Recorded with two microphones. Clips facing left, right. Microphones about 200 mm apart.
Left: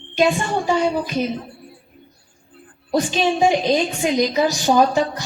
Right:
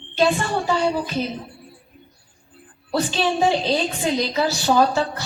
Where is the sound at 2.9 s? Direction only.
15° left (ahead or behind).